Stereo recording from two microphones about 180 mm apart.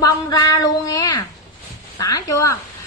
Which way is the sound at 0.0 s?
20° left (ahead or behind).